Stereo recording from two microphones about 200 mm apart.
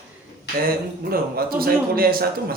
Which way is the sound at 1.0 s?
45° right (ahead or behind).